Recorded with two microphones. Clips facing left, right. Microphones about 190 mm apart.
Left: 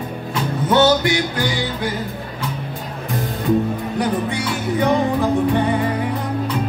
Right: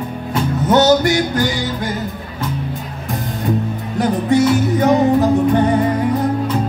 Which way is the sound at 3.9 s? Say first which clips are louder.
Right 8 dB; 45° right (ahead or behind).